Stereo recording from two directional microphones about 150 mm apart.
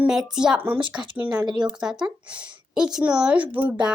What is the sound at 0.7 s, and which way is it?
Speech, 30° right (ahead or behind).